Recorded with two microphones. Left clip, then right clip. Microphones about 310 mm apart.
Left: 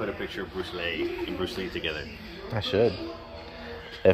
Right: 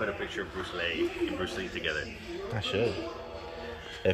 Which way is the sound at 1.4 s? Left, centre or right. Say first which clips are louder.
Left 2 dB; left.